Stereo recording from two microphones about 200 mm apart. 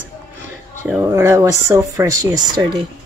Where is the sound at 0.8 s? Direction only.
10° right (ahead or behind).